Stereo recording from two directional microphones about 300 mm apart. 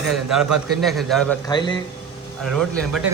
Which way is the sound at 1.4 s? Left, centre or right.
Centre.